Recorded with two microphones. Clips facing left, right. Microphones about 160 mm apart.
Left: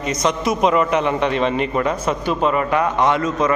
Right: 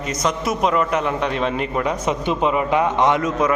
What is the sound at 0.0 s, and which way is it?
A man's voice, 5° right (ahead or behind).